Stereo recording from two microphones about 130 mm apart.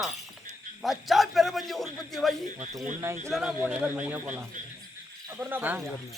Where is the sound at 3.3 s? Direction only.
5° right (ahead or behind).